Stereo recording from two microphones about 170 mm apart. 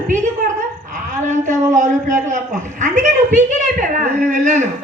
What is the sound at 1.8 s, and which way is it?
A woman's voice, 45° right (ahead or behind).